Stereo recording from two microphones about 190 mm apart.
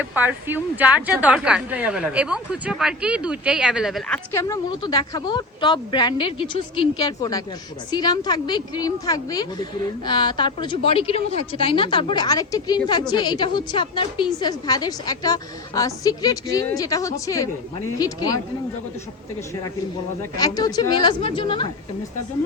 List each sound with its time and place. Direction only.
0.0 s a woman's voice: 10° right (ahead or behind)
4.1 s a woman's voice: 15° left (ahead or behind)
20.3 s a woman's voice: 20° left (ahead or behind)